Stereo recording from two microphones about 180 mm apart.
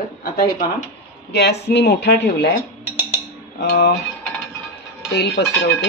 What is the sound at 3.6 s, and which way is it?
Speech, 70° left (ahead or behind).